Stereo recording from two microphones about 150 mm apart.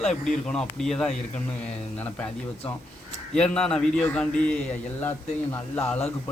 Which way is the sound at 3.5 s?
5° left (ahead or behind).